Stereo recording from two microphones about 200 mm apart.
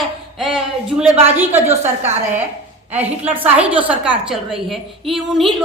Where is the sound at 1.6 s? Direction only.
35° right (ahead or behind).